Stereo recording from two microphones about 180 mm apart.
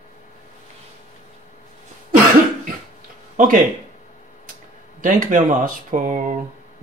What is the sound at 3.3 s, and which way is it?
Speech, 45° right (ahead or behind).